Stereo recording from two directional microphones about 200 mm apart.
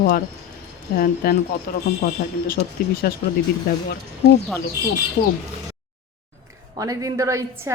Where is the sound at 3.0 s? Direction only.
50° left (ahead or behind).